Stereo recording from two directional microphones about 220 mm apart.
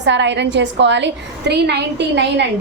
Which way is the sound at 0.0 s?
50° right (ahead or behind).